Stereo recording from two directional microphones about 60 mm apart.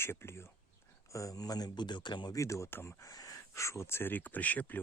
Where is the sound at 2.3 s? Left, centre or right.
Left.